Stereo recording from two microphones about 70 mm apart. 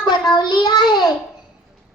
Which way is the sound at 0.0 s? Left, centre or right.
Left.